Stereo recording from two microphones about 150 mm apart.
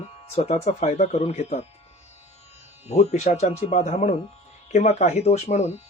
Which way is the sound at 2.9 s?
50° left (ahead or behind).